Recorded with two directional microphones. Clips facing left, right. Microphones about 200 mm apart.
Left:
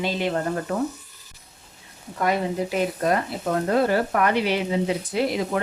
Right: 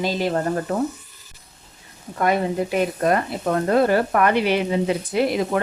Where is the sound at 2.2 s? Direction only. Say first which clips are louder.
Right 3 dB; 55° right (ahead or behind).